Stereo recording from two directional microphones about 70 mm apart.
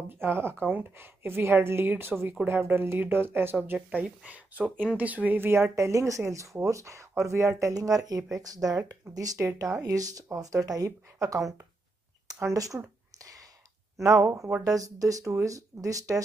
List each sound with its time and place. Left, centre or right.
0.1 s a woman's voice: right
4.3 s speech: right
7.7 s speech: right
12.5 s speech: right
13.2 s a sound: right
13.9 s speech: right
14.6 s speech: right